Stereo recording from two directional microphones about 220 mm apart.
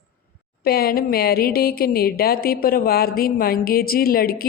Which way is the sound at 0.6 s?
45° left (ahead or behind).